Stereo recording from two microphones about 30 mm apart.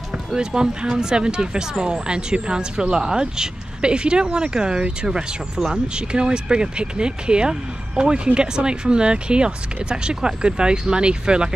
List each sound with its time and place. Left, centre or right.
0.3 s speech: right